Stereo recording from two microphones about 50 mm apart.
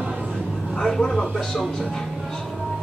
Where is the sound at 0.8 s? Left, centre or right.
Centre.